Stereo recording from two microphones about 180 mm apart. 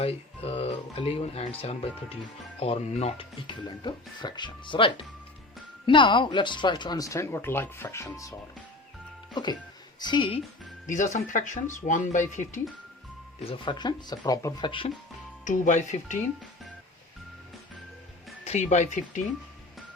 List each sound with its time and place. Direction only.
0.0 s speech: 35° left (ahead or behind)
10.8 s speech: 45° left (ahead or behind)
13.4 s speech: 30° left (ahead or behind)
15.4 s speech: 45° left (ahead or behind)
18.4 s speech: 40° left (ahead or behind)